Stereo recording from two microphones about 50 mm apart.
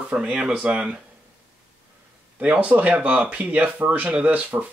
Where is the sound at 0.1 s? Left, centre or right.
Centre.